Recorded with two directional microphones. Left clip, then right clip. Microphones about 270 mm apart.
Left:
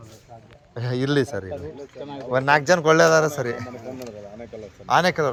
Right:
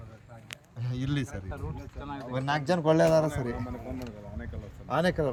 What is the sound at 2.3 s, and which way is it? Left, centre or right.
A man's voice, centre.